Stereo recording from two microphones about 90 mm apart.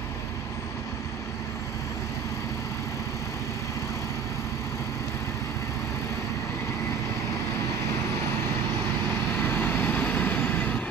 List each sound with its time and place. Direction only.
9.4 s vehicle: 25° left (ahead or behind)